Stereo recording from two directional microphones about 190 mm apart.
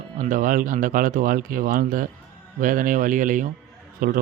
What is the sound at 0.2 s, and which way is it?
Speech, 45° right (ahead or behind).